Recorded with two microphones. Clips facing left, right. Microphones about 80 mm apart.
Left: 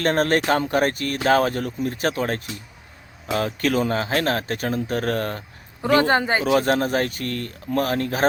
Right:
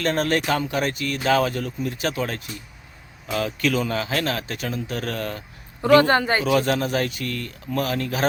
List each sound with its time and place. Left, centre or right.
0.0 s speech: left
5.9 s speech: left
6.6 s speech: left